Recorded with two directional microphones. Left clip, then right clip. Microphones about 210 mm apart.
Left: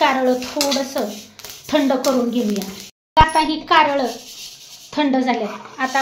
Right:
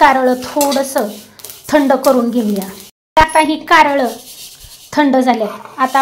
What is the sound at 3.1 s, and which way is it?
A child's voice, 30° right (ahead or behind).